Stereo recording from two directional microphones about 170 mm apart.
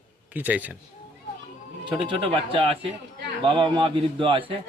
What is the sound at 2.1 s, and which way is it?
Speech, 30° right (ahead or behind).